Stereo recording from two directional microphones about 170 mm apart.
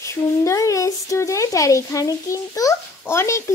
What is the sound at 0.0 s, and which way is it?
A child's voice, 15° left (ahead or behind).